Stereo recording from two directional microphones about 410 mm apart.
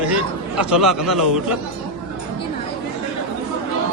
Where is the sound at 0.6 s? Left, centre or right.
Centre.